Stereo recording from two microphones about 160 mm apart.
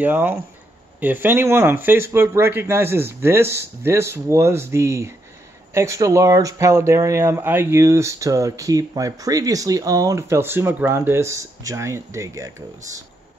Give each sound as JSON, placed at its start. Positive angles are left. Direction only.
{"t": 0.0, "sound": "speech", "side_deg": -10}